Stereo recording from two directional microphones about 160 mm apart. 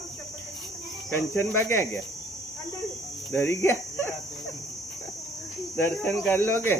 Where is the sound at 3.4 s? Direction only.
15° left (ahead or behind).